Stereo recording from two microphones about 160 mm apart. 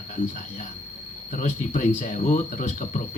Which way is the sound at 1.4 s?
50° left (ahead or behind).